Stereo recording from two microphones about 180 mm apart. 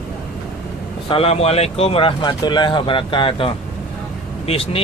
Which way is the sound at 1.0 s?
30° left (ahead or behind).